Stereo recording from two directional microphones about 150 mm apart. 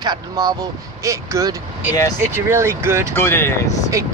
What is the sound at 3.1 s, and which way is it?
Speech, 15° left (ahead or behind).